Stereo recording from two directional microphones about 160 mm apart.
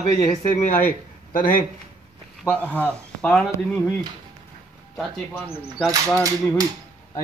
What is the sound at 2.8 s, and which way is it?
Speech, 15° right (ahead or behind).